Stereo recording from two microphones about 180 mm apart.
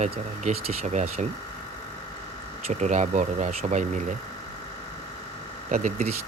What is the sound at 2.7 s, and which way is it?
Speech, 40° right (ahead or behind).